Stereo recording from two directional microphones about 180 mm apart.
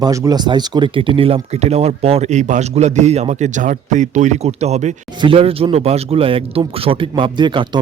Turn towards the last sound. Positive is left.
turn(degrees=-25)  # may be behind; listen again after turning